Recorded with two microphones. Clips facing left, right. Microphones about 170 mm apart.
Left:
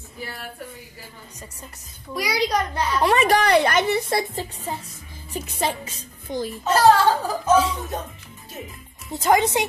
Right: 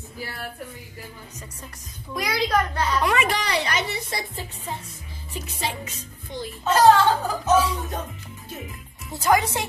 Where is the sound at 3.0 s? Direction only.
35° left (ahead or behind).